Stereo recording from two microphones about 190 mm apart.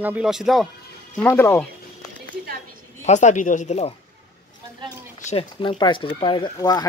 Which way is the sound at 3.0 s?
40° left (ahead or behind).